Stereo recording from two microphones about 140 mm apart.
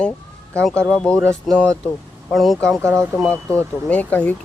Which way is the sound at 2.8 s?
20° right (ahead or behind).